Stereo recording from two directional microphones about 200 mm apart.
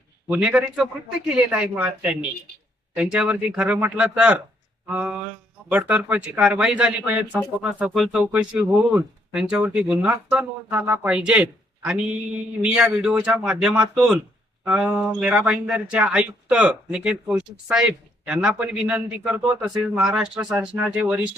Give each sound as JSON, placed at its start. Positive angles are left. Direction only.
{"t": 0.3, "sound": "speech", "side_deg": -5}